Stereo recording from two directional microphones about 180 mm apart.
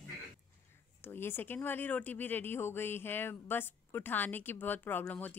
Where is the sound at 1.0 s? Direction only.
10° left (ahead or behind).